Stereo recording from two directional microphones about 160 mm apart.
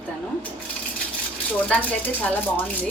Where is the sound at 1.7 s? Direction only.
10° left (ahead or behind).